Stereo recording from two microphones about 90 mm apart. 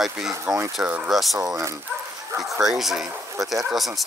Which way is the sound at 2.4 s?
5° right (ahead or behind).